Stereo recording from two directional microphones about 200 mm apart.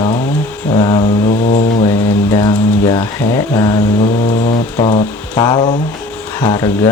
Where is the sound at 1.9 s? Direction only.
15° left (ahead or behind).